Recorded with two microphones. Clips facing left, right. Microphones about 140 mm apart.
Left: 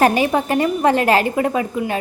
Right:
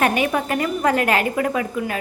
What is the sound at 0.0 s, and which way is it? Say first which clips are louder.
A woman's voice: left 4 dB; 35° left (ahead or behind).